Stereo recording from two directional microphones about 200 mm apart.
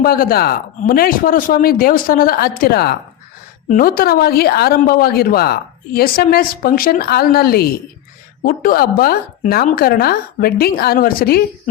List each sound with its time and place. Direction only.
0.0 s a woman's voice: 45° left (ahead or behind)